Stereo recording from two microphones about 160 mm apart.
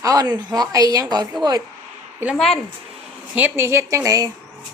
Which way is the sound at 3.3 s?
15° right (ahead or behind).